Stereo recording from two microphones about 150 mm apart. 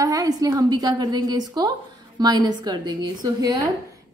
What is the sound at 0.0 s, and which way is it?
A woman's voice, 25° right (ahead or behind).